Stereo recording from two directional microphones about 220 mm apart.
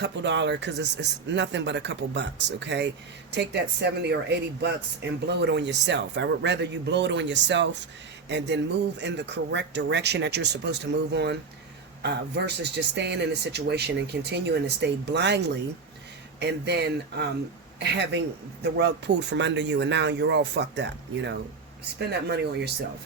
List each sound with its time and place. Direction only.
0.0 s speech: 55° right (ahead or behind)